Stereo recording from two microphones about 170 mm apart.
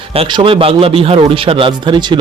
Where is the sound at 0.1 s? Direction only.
30° right (ahead or behind).